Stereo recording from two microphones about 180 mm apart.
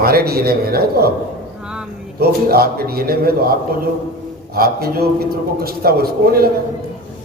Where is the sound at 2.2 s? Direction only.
60° right (ahead or behind).